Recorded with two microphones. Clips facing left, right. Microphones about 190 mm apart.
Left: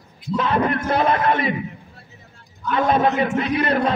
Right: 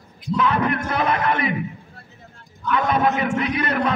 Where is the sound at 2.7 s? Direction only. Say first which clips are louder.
Left 2 dB; 30° left (ahead or behind).